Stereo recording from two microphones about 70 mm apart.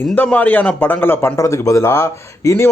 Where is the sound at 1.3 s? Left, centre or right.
Left.